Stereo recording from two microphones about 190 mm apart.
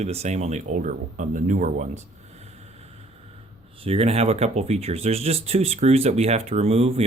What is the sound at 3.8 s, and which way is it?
Speech, 30° right (ahead or behind).